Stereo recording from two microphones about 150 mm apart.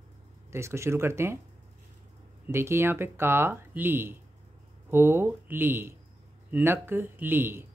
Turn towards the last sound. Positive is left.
turn(degrees=-15)  # may be behind; listen again after turning